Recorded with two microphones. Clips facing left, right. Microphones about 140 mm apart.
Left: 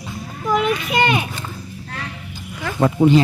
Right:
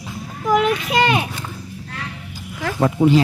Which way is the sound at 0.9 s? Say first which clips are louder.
Right 1 dB; 85° right.